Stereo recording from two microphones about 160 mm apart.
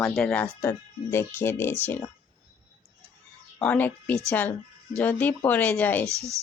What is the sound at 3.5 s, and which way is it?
A woman's voice, 10° left (ahead or behind).